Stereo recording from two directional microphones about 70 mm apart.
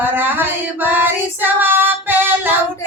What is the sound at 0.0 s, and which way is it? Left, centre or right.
Female singing, right.